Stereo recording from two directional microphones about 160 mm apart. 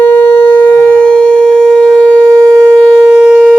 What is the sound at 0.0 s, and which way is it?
Shofar, 10° left (ahead or behind).